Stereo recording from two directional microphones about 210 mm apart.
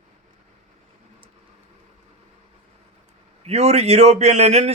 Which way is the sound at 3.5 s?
30° right (ahead or behind).